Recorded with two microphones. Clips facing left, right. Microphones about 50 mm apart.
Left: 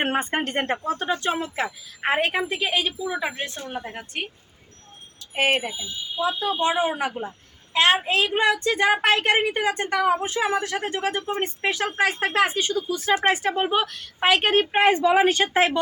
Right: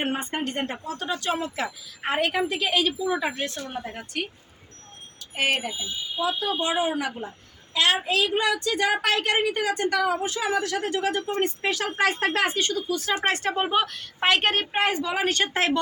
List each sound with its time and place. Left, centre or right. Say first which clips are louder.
0.0 s a woman's voice: left 4 dB; left
2.5 s speech: right 1 dB; centre
3.3 s speech: right 1 dB; centre
3.6 s a woman's voice: left 1 dB; left
11.2 s a woman's voice: even; centre
11.9 s a woman's voice: left 2 dB; centre
14.7 s speech: left 7 dB; left